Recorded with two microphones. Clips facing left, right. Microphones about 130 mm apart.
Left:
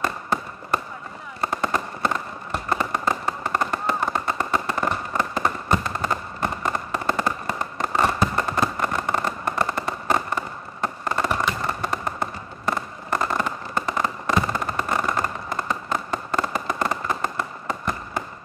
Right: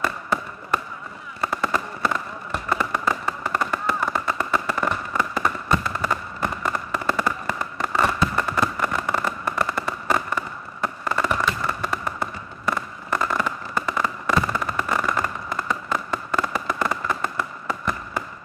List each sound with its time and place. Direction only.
1.4 s fireworks: 45° left (ahead or behind)
2.0 s fireworks: 35° left (ahead or behind)
13.1 s fireworks: 40° left (ahead or behind)